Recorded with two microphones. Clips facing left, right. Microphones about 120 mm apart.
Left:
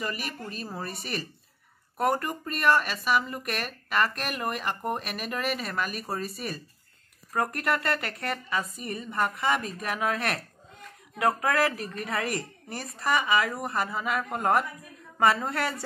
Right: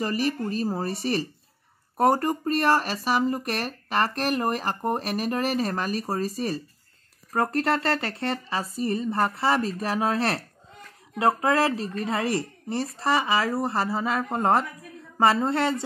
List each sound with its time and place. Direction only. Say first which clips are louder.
0.0 s a woman's voice: right 8 dB; 35° right (ahead or behind)